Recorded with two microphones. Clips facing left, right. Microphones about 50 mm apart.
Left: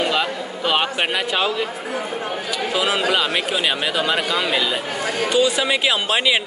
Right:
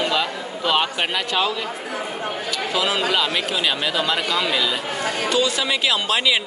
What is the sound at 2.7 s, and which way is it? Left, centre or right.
Speech, centre.